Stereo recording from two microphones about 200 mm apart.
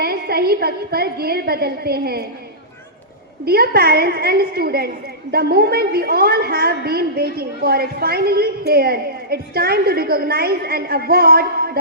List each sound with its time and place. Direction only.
0.0 s a woman's voice: 50° right (ahead or behind)
3.4 s a woman's voice: 50° right (ahead or behind)